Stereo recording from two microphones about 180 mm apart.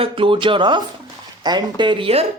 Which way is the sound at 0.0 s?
30° right (ahead or behind).